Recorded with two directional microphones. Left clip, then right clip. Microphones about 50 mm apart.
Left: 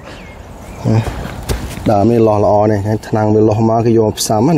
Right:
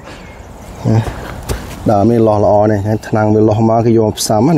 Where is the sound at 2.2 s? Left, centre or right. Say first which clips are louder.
Right 1 dB; right.